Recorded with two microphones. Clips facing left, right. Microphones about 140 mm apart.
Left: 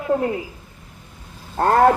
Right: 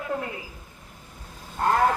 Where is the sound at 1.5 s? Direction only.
55° left (ahead or behind).